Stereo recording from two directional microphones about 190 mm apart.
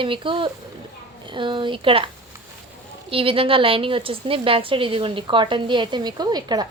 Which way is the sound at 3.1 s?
30° right (ahead or behind).